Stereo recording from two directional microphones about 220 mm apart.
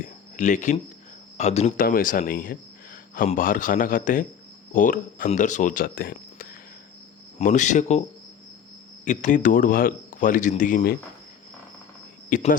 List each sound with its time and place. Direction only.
0.0 s a sound: 35° left (ahead or behind)
1.4 s a man's voice: 30° left (ahead or behind)
9.0 s a man's voice: 35° left (ahead or behind)
12.3 s a man's voice: 35° left (ahead or behind)